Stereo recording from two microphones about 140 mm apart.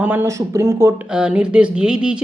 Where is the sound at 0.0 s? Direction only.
15° right (ahead or behind).